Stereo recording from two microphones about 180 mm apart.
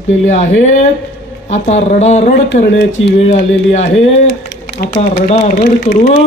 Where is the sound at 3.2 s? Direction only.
40° left (ahead or behind).